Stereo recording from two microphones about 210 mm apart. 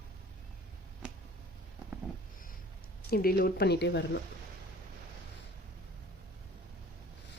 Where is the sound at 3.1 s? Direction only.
45° left (ahead or behind).